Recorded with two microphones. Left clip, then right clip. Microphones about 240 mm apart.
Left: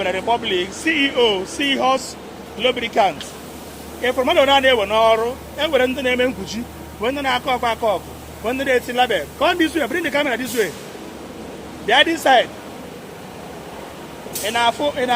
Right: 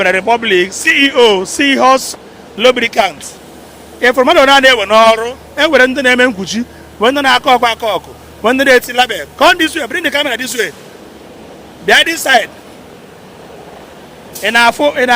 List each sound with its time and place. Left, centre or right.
0.0 s a man's voice: right
11.9 s a man's voice: right
14.4 s a man's voice: right